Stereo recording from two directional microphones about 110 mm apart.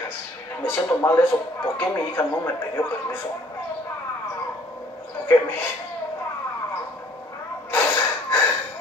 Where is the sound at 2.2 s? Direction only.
15° left (ahead or behind).